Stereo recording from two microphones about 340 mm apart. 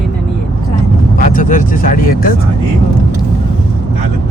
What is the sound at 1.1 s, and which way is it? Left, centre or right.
Speech, left.